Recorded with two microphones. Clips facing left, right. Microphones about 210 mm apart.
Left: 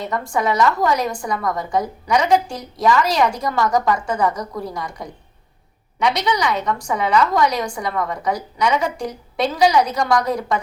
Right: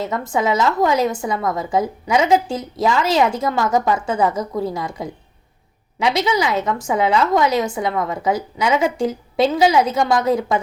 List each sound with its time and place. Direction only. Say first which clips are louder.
0.0 s a woman's voice: right 1 dB; 25° right (ahead or behind)